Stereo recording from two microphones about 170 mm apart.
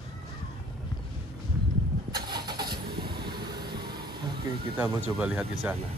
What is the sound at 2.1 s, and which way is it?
Vehicle, 25° right (ahead or behind).